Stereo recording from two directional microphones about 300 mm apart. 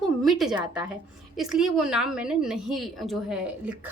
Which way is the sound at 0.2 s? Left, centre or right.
Centre.